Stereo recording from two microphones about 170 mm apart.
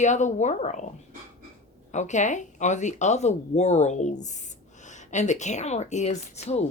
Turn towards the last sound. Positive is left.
turn(degrees=40)  # may be behind; listen again after turning